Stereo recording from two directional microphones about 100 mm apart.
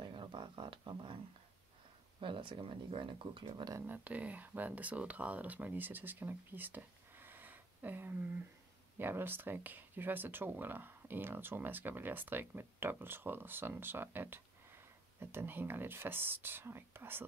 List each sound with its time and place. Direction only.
0.0 s a sound: 55° right (ahead or behind)
2.1 s speech: 60° right (ahead or behind)
3.8 s speech: 15° right (ahead or behind)